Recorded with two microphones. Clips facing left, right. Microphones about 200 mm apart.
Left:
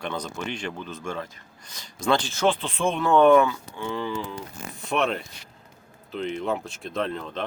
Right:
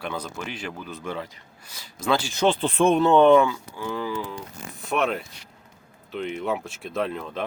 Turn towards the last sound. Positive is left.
turn(degrees=-5)  # may be behind; listen again after turning